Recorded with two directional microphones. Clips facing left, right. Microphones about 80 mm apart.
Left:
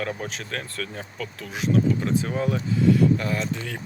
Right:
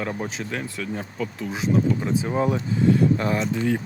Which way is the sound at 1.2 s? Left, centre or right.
Right.